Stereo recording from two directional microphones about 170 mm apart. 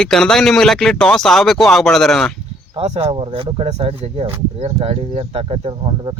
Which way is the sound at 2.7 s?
35° right (ahead or behind).